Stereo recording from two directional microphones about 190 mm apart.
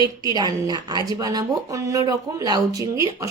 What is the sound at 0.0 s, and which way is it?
A woman's voice, 20° right (ahead or behind).